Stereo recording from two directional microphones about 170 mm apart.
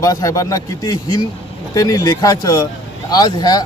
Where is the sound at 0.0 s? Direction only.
20° left (ahead or behind).